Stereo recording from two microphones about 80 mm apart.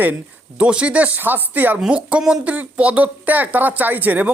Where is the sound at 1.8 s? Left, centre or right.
Centre.